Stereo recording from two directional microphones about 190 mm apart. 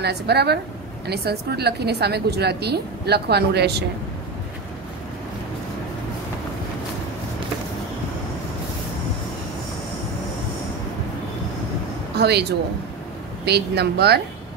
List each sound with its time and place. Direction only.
0.0 s a woman's voice: 60° right (ahead or behind)
12.2 s a woman's voice: 60° right (ahead or behind)